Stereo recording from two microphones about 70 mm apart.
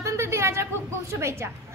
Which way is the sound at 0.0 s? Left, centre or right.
Right.